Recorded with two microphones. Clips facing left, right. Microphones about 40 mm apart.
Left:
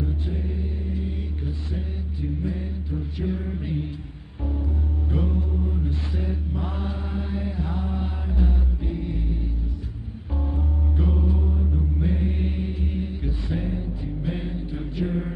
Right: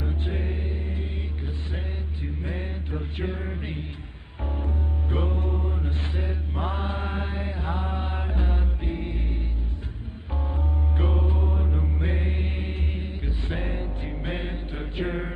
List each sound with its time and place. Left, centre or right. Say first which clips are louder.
0.0 s music: left 1 dB; right
2.2 s mantra: left 4 dB; right
3.3 s mantra: left 4 dB; right
4.5 s music: left 2 dB; right
6.5 s mantra: right 1 dB; right
11.0 s music: left 2 dB; right
12.4 s mantra: left 4 dB; right
13.5 s music: left 2 dB; right